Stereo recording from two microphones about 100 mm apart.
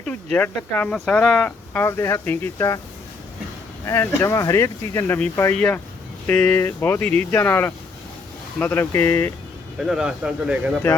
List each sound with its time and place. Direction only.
0.0 s speech: 10° left (ahead or behind)
1.9 s speech: 30° left (ahead or behind)
3.8 s speech: 25° left (ahead or behind)
9.8 s speech: 5° right (ahead or behind)